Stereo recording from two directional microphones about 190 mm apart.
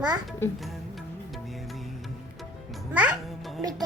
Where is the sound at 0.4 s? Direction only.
15° left (ahead or behind).